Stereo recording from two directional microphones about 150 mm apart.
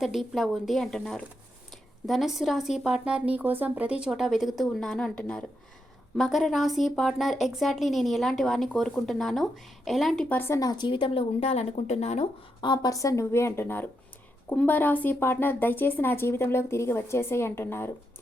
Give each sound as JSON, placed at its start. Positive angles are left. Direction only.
{"t": 0.0, "sound": "a woman's voice", "side_deg": 0}
{"t": 10.2, "sound": "a woman's voice", "side_deg": 15}
{"t": 12.6, "sound": "a woman's voice", "side_deg": 25}